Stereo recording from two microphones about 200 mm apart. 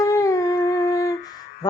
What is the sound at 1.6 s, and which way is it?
Music, 20° left (ahead or behind).